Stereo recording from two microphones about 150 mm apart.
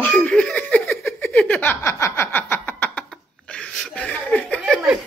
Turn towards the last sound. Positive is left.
turn(degrees=10)  # may be behind; listen again after turning